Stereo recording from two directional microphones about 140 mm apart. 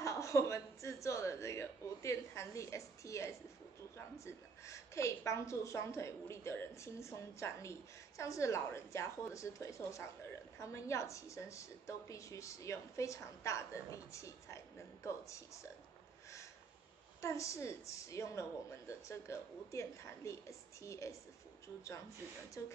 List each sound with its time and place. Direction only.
0.0 s a sound: 20° left (ahead or behind)
4.2 s a woman's voice: 20° left (ahead or behind)
17.2 s a woman's voice: 20° left (ahead or behind)
22.6 s a woman's voice: 25° left (ahead or behind)